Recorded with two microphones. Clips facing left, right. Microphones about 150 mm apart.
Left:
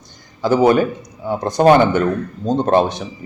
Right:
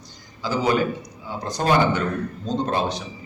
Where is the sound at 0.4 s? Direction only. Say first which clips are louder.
Left 8 dB; 55° left (ahead or behind).